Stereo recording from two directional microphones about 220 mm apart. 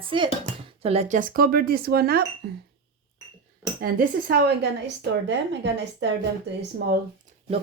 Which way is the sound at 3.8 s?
40° right (ahead or behind).